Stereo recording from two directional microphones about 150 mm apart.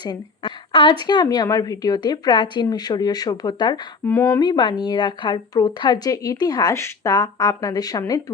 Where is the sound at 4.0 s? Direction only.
15° left (ahead or behind).